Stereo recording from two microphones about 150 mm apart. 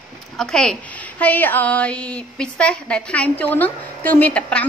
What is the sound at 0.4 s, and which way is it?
A woman's voice, 5° left (ahead or behind).